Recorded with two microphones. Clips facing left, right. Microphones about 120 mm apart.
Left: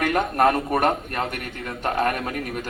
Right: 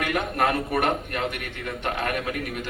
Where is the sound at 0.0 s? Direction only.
40° left (ahead or behind).